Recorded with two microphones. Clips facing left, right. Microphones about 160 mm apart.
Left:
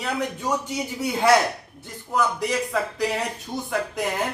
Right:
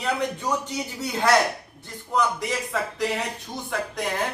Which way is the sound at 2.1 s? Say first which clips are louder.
Left 1 dB; centre (ahead or behind).